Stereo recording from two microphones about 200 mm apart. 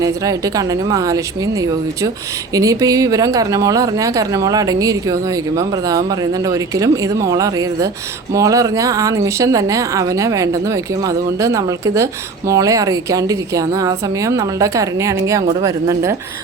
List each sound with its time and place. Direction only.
0.0 s speech: 15° right (ahead or behind)